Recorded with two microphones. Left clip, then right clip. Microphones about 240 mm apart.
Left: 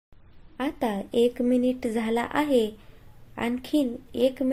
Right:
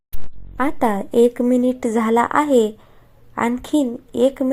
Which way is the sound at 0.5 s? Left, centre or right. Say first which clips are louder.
Right 9 dB; centre.